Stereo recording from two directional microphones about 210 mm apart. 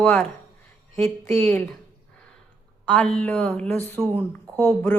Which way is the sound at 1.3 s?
10° left (ahead or behind).